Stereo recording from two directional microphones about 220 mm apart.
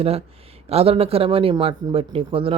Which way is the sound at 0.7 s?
25° right (ahead or behind).